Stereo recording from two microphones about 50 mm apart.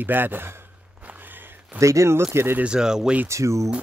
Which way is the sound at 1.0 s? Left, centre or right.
Right.